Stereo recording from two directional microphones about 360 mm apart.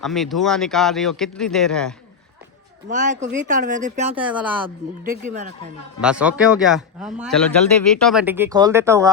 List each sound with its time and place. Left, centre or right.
0.0 s speech: centre
2.9 s speech: right
4.2 s speech: centre
5.2 s speech: right
6.0 s speech: centre